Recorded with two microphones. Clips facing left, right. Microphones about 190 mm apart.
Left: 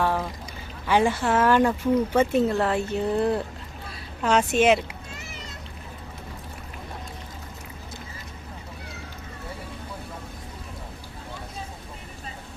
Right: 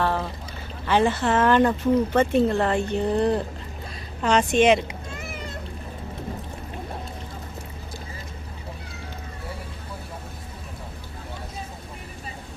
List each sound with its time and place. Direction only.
0.0 s boat: 10° left (ahead or behind)
0.9 s speech: 10° left (ahead or behind)
5.1 s a sound: 55° right (ahead or behind)